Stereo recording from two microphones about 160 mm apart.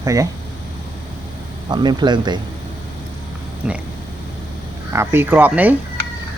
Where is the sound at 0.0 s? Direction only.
20° right (ahead or behind).